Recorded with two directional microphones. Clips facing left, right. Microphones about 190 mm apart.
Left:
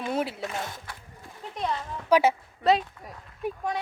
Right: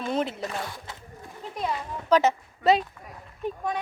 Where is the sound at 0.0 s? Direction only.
10° left (ahead or behind).